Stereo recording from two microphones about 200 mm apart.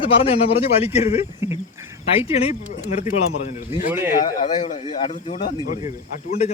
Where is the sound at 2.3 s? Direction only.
30° left (ahead or behind).